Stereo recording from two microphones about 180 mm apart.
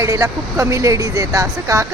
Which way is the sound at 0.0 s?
15° right (ahead or behind).